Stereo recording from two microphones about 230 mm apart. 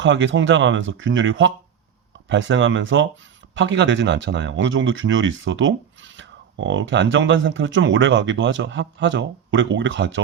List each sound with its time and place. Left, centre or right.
0.0 s speech: right